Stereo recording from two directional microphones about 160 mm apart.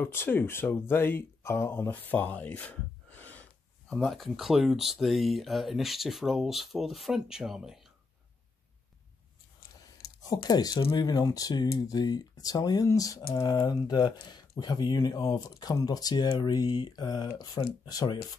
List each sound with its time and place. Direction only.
0.0 s speech: 15° left (ahead or behind); by 7.9 s centre (ahead or behind)
10.2 s speech: 25° left (ahead or behind)